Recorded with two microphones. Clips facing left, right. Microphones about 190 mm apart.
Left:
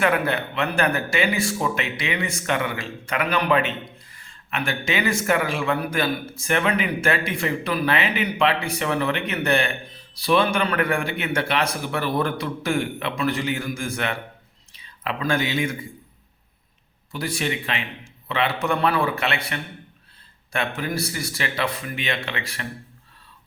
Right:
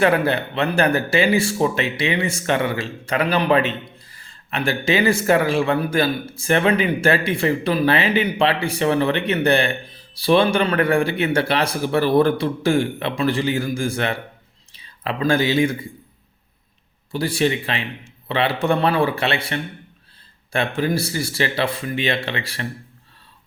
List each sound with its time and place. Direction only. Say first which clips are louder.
0.0 s speech: right 4 dB; 30° right (ahead or behind)
17.1 s speech: right 6 dB; 30° right (ahead or behind)